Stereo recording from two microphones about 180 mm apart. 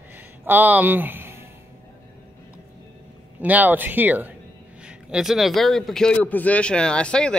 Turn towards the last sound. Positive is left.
turn(degrees=5)  # may be behind; listen again after turning